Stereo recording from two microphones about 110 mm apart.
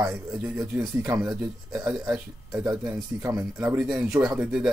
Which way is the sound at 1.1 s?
5° right (ahead or behind).